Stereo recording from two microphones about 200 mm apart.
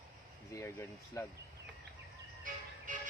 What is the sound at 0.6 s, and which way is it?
Speech, 15° left (ahead or behind).